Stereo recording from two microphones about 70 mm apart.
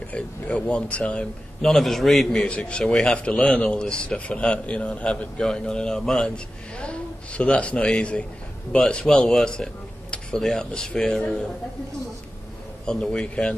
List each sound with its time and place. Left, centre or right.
0.1 s a man's voice: centre
1.7 s a man's voice: centre
2.4 s a man's voice: centre
12.8 s a man's voice: centre